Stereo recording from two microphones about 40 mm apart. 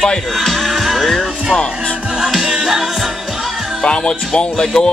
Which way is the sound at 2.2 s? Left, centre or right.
Centre.